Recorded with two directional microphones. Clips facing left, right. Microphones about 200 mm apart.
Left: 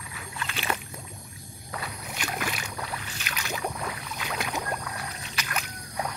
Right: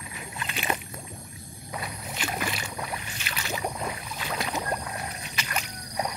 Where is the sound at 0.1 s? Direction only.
20° right (ahead or behind).